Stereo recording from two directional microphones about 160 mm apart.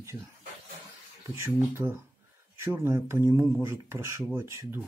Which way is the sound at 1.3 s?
15° right (ahead or behind).